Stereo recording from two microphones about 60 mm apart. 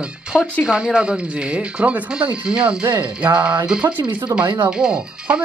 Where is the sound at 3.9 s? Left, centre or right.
Right.